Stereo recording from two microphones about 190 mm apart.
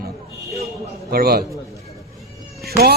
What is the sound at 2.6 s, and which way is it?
Speech, 55° right (ahead or behind).